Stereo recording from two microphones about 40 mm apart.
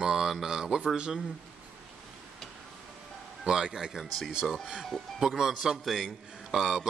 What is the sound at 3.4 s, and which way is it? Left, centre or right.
Speech, centre.